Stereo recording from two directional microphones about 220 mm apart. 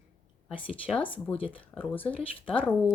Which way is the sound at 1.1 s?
5° left (ahead or behind).